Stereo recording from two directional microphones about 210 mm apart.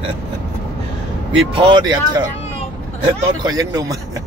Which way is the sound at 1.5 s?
20° right (ahead or behind).